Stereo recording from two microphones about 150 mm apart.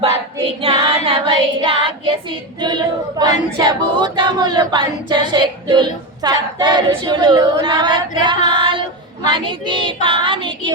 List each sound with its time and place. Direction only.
0.6 s female singing: 35° right (ahead or behind)
2.6 s choir: 30° right (ahead or behind)
8.2 s female singing: 30° right (ahead or behind)